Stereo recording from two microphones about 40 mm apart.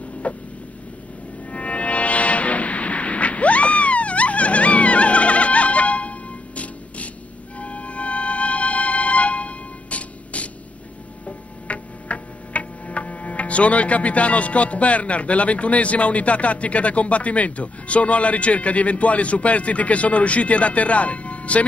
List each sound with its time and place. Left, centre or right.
0.2 s a sound: left
1.5 s train: left
7.5 s music: left
11.2 s tick-tock: left